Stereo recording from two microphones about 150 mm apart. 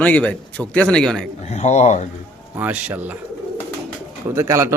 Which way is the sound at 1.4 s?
50° left (ahead or behind).